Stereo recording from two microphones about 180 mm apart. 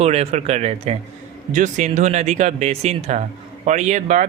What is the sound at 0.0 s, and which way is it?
Speech, 35° right (ahead or behind).